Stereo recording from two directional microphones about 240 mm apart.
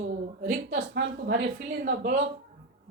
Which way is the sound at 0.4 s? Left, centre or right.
Right.